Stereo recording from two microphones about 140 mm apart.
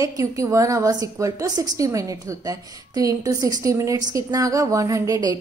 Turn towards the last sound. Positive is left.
turn(degrees=-25)  # may be behind; listen again after turning